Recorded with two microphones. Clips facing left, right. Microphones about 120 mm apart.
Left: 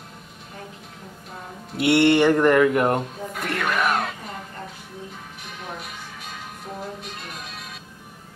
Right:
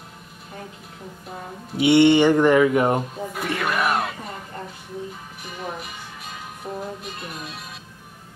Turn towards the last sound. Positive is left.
turn(degrees=0)  # may be behind; listen again after turning